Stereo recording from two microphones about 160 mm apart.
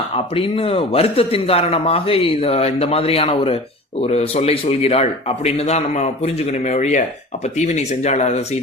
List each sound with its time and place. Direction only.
0.3 s speech: 35° left (ahead or behind)